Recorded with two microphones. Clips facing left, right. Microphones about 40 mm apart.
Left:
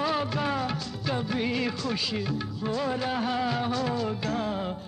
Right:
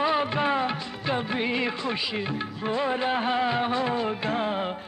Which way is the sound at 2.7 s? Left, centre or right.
Right.